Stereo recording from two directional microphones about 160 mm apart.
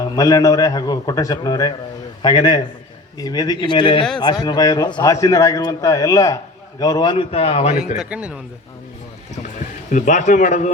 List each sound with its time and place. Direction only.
0.0 s a man's voice: 20° left (ahead or behind); by 7.9 s 40° left (ahead or behind)
7.9 s a man's voice: 5° right (ahead or behind)
9.9 s speech: 50° left (ahead or behind)